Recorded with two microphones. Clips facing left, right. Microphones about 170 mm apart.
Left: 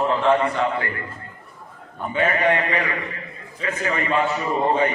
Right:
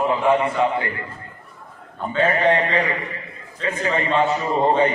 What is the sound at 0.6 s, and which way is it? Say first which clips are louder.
Speech: right 3 dB; 20° right (ahead or behind).